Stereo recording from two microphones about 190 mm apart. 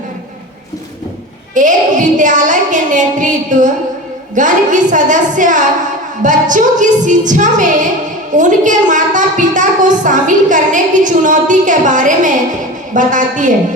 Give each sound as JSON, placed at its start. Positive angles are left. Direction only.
{"t": 1.5, "sound": "a woman's voice", "side_deg": -40}